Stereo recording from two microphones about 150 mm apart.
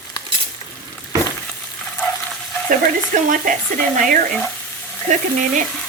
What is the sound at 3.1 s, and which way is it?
Stir, 60° right (ahead or behind).